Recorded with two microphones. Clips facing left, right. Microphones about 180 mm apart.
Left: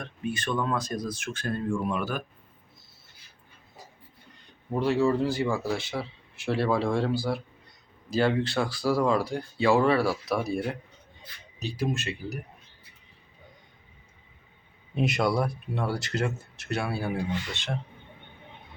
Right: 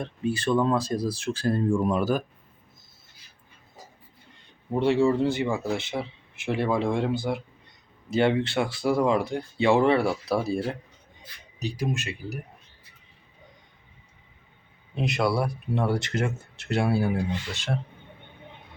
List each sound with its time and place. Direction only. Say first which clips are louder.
0.0 s speech: right 5 dB; 30° right (ahead or behind)
4.7 s speech: right 2 dB; 25° right (ahead or behind)
11.6 s speech: even; 15° right (ahead or behind)
15.0 s speech: even; centre (ahead or behind)
15.7 s speech: right 4 dB; 20° right (ahead or behind)